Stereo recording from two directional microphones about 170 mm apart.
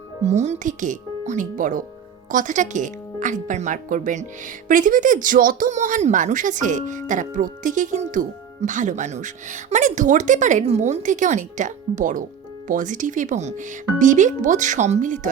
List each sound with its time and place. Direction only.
0.3 s speech: 40° right (ahead or behind)